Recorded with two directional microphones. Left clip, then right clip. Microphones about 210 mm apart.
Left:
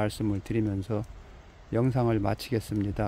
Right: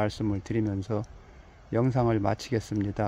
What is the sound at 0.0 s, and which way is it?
Speech, 5° left (ahead or behind).